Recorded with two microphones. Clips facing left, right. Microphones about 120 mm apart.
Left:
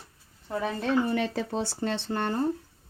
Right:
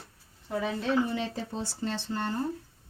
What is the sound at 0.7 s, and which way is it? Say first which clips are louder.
Speech: left 2 dB; 55° left (ahead or behind).